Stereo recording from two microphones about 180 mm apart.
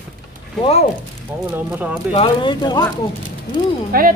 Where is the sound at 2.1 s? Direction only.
30° left (ahead or behind).